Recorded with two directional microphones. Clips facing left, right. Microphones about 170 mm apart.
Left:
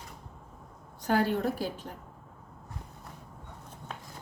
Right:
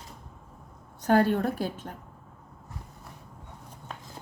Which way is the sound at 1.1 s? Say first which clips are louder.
Right 4 dB; 55° right (ahead or behind).